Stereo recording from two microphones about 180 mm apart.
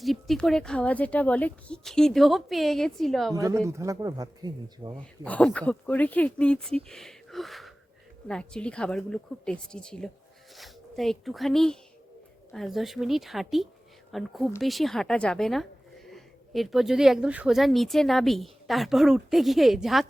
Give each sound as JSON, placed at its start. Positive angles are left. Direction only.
{"t": 0.0, "sound": "speech", "side_deg": 0}
{"t": 3.3, "sound": "speech", "side_deg": -15}
{"t": 5.2, "sound": "speech", "side_deg": 5}
{"t": 6.8, "sound": "a sound", "side_deg": 0}
{"t": 8.3, "sound": "speech", "side_deg": 5}